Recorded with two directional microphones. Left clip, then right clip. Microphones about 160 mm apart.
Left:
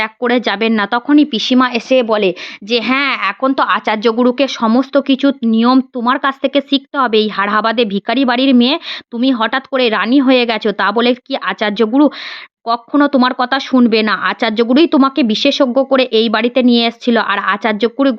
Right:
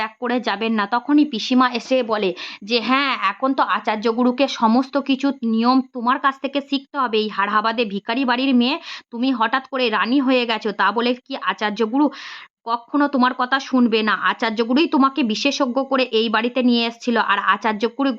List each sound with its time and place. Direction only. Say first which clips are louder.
0.0 s speech: left 8 dB; 35° left (ahead or behind)